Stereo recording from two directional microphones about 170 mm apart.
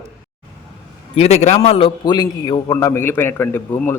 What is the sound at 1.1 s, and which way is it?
A man's voice, 40° left (ahead or behind).